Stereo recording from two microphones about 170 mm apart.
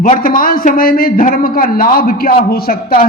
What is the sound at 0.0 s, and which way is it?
A man's voice, 55° left (ahead or behind).